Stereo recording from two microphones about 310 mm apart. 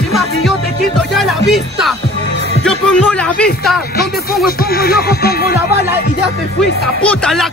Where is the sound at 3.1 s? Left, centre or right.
Centre.